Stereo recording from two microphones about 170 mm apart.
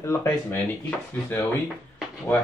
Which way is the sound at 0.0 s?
15° left (ahead or behind).